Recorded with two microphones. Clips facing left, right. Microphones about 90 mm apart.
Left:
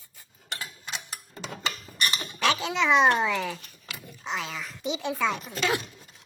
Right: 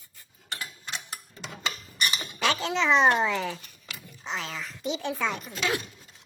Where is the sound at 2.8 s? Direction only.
5° left (ahead or behind).